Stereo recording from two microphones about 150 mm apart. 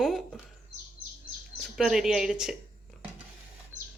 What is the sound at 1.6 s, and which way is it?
Speech, 5° right (ahead or behind).